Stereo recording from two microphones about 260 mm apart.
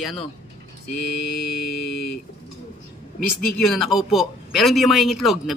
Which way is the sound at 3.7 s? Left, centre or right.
Centre.